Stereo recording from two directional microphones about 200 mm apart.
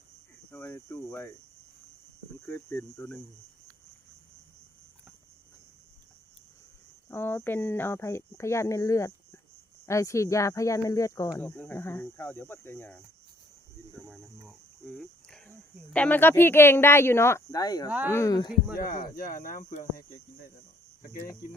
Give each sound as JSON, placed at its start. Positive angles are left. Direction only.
{"t": 0.5, "sound": "speech", "side_deg": 10}
{"t": 2.5, "sound": "speech", "side_deg": 10}
{"t": 7.1, "sound": "speech", "side_deg": 10}
{"t": 14.4, "sound": "speech", "side_deg": 0}
{"t": 17.8, "sound": "speech", "side_deg": -5}
{"t": 18.1, "sound": "speech", "side_deg": 15}
{"t": 18.8, "sound": "speech", "side_deg": 45}